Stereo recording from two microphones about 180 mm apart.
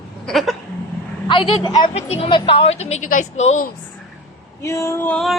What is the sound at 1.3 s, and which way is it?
A woman's voice, 30° left (ahead or behind).